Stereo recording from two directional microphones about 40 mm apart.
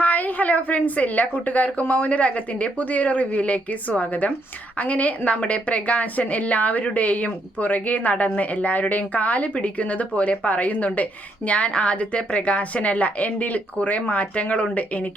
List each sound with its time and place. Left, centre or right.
0.0 s a woman's voice: left